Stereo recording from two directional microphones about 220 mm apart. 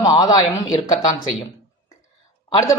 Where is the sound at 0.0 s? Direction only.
20° left (ahead or behind).